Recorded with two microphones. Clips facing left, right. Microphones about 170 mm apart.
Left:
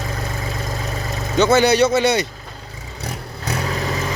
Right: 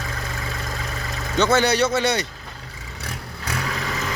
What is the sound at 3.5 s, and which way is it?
Vehicle, 35° left (ahead or behind).